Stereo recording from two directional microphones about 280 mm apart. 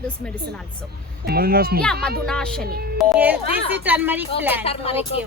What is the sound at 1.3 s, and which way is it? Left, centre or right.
Speech, right.